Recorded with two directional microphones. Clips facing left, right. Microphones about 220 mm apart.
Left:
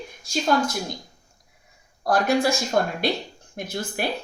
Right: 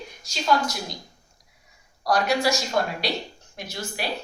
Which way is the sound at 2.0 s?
50° left (ahead or behind).